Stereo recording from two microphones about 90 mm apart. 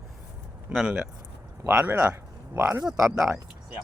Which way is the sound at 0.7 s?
20° right (ahead or behind).